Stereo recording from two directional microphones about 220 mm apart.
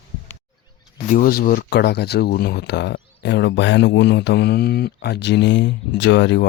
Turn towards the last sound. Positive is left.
turn(degrees=55)  # may be behind; listen again after turning